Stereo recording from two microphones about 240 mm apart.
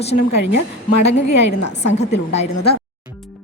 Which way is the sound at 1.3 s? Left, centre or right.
Left.